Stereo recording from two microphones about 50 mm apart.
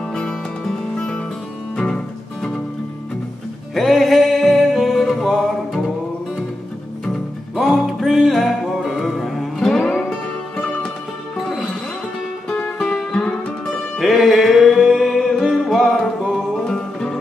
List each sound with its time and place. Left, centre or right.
0.1 s music: centre
3.7 s music: centre
7.6 s music: centre
9.7 s music: centre
12.7 s music: centre
13.9 s music: centre
14.9 s a capella: centre
15.5 s music: centre
16.6 s music: centre